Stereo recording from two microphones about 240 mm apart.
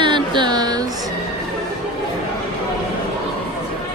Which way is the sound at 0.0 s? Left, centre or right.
Centre.